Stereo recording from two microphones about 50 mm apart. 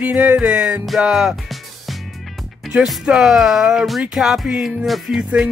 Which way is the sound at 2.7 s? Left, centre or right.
Right.